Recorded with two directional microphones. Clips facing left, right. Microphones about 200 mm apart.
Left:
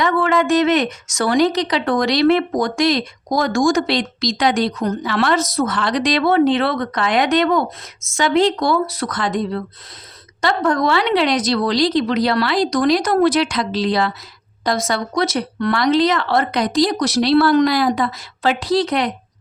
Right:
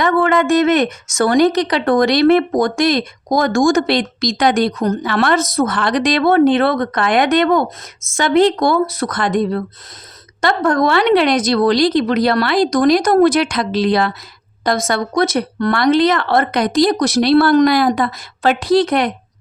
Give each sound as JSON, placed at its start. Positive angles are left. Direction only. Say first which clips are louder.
{"t": 0.0, "sound": "speech", "louder": "right 3 dB", "side_deg": -50}